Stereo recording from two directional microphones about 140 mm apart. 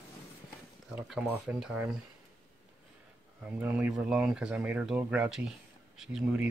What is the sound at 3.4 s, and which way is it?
Speech, 10° right (ahead or behind).